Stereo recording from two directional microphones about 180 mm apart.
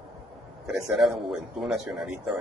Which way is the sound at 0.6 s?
Centre (ahead or behind).